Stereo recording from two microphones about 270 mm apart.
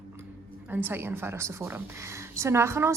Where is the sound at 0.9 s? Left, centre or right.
Centre.